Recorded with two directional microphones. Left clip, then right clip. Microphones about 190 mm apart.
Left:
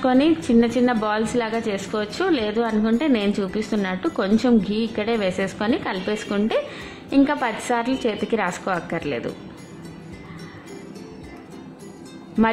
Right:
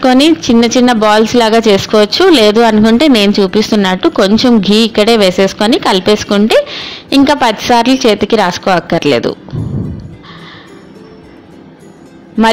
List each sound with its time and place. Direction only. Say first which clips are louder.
0.0 s speech: right 11 dB; 25° right (ahead or behind)